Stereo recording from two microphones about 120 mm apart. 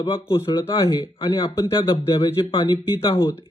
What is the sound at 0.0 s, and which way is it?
Speech, 45° left (ahead or behind).